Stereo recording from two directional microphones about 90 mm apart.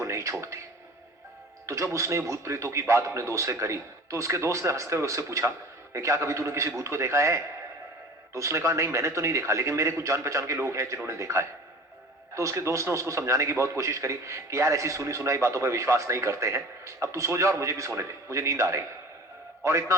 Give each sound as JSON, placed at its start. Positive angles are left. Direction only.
{"t": 0.0, "sound": "speech", "side_deg": -35}
{"t": 1.6, "sound": "a man's voice", "side_deg": -35}